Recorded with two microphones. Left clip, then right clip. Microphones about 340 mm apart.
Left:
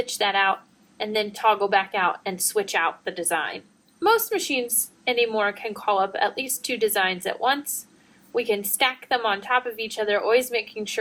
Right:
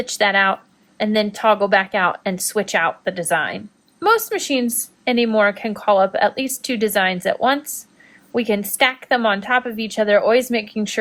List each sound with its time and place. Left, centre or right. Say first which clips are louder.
0.1 s a woman's voice: right 7 dB; right
5.0 s a woman's voice: right 6 dB; right